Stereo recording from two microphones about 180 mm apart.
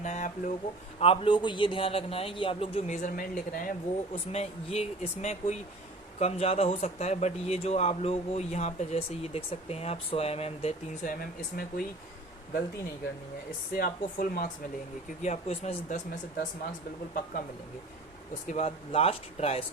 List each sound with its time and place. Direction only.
0.0 s a sound: 45° left (ahead or behind)
0.9 s speech: 30° left (ahead or behind); by 3.8 s 50° left (ahead or behind)
4.1 s speech: 35° left (ahead or behind)
11.2 s speech: 55° left (ahead or behind)
13.7 s speech: 55° left (ahead or behind)
15.2 s speech: 40° left (ahead or behind)
18.4 s speech: 40° left (ahead or behind)